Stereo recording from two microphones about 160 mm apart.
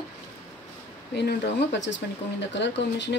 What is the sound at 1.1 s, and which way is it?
A woman's voice, 90° left.